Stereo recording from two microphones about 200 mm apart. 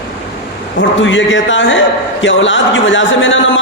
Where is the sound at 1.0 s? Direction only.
70° left (ahead or behind).